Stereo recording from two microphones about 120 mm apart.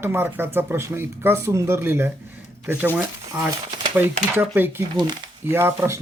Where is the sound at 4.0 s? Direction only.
20° right (ahead or behind).